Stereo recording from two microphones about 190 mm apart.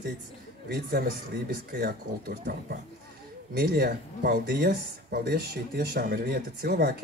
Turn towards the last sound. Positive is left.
turn(degrees=-55)  # may be behind; listen again after turning